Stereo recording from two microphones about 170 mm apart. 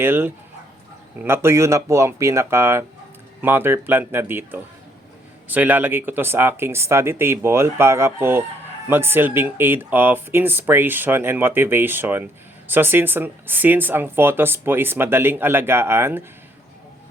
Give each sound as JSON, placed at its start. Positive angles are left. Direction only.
{"t": 0.0, "sound": "speech", "side_deg": -10}